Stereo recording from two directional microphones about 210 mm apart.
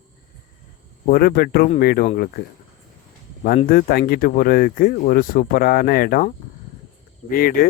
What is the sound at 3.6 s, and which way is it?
Speech, 45° left (ahead or behind).